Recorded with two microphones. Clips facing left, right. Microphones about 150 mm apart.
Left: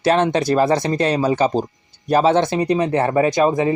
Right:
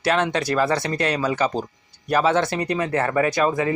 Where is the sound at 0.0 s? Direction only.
25° left (ahead or behind).